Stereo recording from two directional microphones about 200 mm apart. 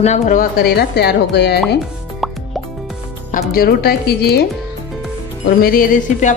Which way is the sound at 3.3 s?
45° left (ahead or behind).